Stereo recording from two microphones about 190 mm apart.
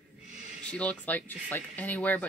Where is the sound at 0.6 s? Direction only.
5° left (ahead or behind).